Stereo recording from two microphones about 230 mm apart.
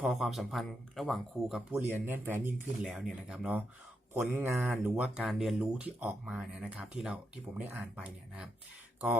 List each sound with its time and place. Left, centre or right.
0.0 s speech: centre